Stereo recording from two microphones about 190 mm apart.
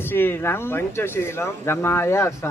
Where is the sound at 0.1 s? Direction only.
10° left (ahead or behind).